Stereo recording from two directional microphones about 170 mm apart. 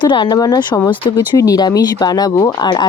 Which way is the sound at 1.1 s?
20° left (ahead or behind).